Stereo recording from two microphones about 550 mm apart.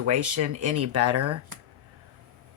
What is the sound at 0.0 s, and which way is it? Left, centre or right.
Speech, right.